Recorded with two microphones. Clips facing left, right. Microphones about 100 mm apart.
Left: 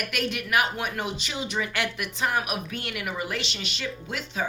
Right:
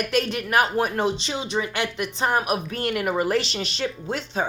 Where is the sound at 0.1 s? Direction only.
35° right (ahead or behind).